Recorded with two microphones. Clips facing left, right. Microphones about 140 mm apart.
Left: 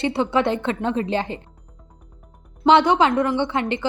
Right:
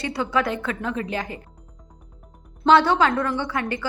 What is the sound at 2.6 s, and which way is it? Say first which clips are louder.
A woman's voice: left 2 dB; 20° left (ahead or behind).